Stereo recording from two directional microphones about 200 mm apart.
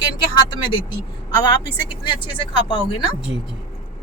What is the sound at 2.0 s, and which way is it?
Speech, 25° left (ahead or behind).